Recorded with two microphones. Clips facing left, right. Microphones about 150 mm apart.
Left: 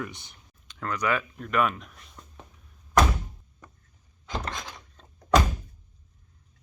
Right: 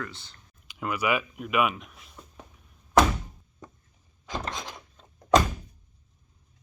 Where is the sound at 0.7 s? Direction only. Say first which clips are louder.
Right 1 dB; 10° right (ahead or behind).